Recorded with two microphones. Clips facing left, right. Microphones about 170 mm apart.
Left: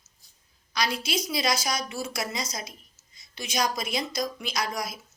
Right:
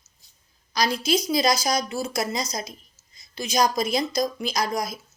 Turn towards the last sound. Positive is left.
turn(degrees=-40)  # may be behind; listen again after turning